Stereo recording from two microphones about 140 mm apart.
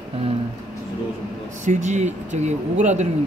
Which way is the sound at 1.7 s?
55° right (ahead or behind).